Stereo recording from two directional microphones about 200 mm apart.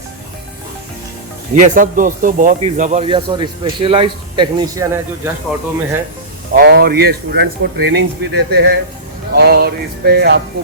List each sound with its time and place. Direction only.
1.5 s speech: 40° right (ahead or behind); by 5.3 s 15° right (ahead or behind)
6.5 s speech: 55° right (ahead or behind)
9.3 s music: 55° right (ahead or behind)